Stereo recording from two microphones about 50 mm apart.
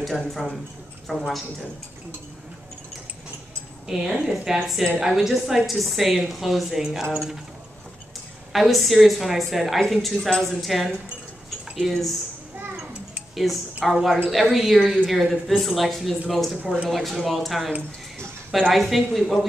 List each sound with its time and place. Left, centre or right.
0.0 s a woman's voice: centre
3.8 s a woman's voice: centre
8.5 s a woman's voice: centre
13.4 s a woman's voice: centre
16.6 s a woman's voice: centre
16.9 s a woman's voice: centre